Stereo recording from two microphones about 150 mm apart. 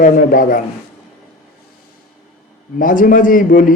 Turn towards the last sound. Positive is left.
turn(degrees=65)  # may be behind; listen again after turning